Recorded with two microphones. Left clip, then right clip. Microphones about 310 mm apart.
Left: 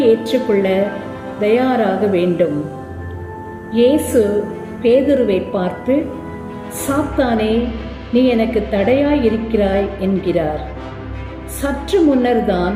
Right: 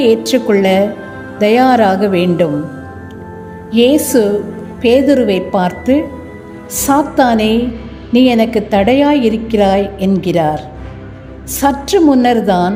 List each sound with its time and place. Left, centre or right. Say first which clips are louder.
0.0 s a woman's voice: right 3 dB; right
3.7 s a woman's voice: right 3 dB; right
7.2 s a woman's voice: right 5 dB; right
11.6 s a woman's voice: right 5 dB; right